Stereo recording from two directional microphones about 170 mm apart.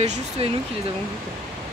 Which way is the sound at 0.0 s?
40° right (ahead or behind).